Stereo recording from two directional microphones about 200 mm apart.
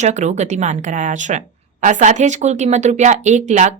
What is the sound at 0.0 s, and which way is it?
A woman's voice, 35° right (ahead or behind).